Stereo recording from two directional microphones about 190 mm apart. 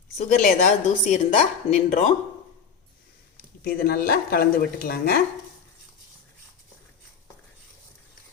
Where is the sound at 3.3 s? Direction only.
50° left (ahead or behind).